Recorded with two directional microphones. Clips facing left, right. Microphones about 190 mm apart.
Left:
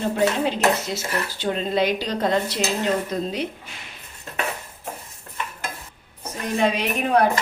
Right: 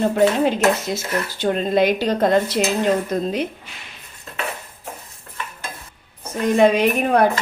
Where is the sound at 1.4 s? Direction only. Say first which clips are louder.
Right 5 dB; 50° right (ahead or behind).